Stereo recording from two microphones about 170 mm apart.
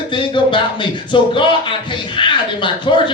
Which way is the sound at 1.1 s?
30° left (ahead or behind).